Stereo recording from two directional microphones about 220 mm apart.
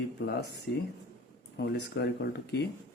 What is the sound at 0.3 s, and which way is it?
Speech, 50° left (ahead or behind).